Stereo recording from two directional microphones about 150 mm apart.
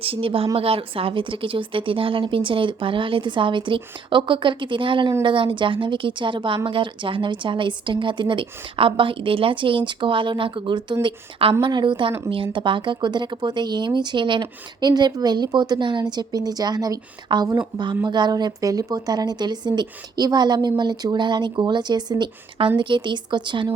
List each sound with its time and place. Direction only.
0.0 s speech: 40° right (ahead or behind)